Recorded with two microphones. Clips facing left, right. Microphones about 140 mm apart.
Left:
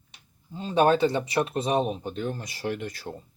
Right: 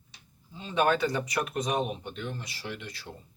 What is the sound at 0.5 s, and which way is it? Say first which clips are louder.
Speech: left 5 dB; 35° left (ahead or behind).